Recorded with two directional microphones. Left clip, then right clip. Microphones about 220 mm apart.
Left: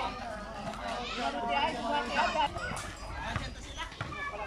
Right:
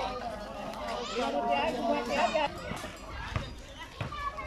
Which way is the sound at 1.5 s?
20° right (ahead or behind).